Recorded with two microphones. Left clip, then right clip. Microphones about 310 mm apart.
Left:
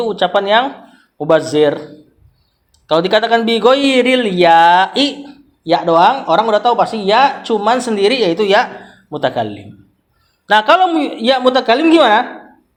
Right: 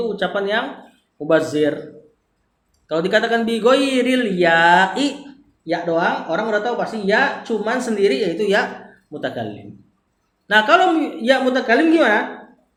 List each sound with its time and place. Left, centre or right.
0.0 s speech: centre
2.8 s speech: left